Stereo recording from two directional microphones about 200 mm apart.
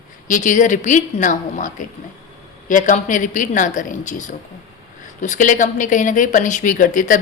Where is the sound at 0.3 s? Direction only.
40° left (ahead or behind).